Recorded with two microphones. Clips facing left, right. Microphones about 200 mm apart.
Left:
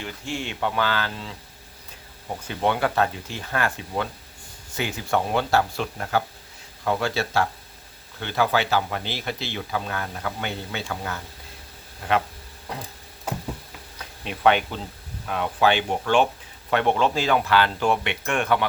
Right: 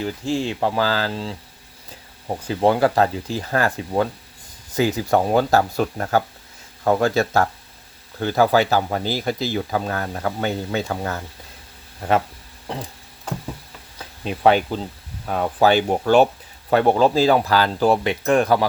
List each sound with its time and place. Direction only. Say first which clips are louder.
0.0 s speech: right 8 dB; 35° right (ahead or behind)
13.3 s a sound: right 1 dB; 10° left (ahead or behind)
14.3 s speech: right 4 dB; 35° right (ahead or behind)